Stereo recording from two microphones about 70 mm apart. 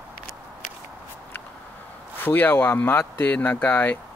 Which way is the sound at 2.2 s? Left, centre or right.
Left.